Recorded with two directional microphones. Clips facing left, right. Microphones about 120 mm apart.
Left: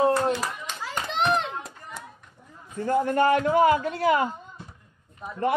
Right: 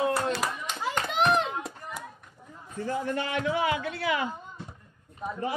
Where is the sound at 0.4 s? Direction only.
15° right (ahead or behind).